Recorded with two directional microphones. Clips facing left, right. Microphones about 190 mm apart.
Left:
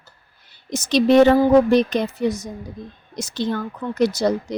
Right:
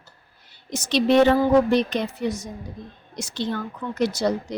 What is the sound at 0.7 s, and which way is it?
A woman's voice, 40° left (ahead or behind).